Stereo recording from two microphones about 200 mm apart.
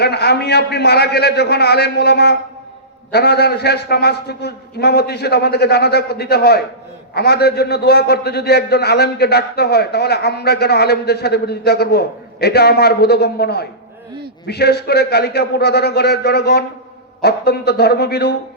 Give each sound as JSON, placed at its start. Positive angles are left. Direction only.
{"t": 0.0, "sound": "a man's voice", "side_deg": 55}